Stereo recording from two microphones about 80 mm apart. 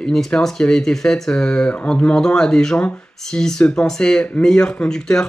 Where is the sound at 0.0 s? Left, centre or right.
Centre.